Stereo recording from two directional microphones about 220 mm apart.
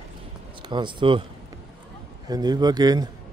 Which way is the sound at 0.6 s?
20° right (ahead or behind).